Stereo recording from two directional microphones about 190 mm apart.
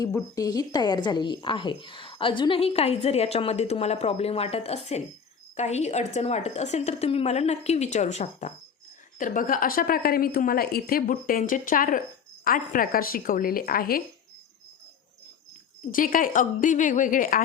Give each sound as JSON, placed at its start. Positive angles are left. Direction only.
{"t": 0.0, "sound": "a woman's voice", "side_deg": 15}
{"t": 15.9, "sound": "a woman's voice", "side_deg": 45}